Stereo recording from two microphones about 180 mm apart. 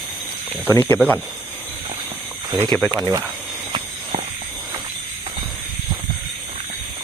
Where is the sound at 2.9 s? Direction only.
20° right (ahead or behind).